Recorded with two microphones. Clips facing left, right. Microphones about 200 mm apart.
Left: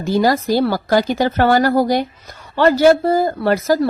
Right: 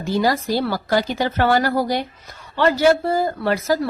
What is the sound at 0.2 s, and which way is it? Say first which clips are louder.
A woman's voice: left 5 dB; 45° left (ahead or behind).